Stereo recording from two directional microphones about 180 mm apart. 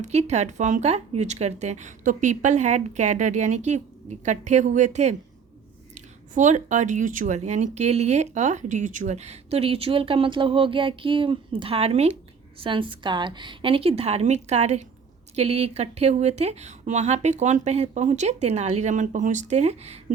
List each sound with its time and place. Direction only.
0.0 s speech: 40° right (ahead or behind)